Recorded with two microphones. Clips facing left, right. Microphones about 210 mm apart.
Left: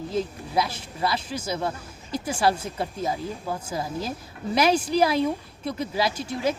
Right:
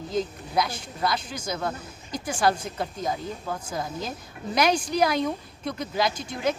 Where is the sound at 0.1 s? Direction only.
5° left (ahead or behind).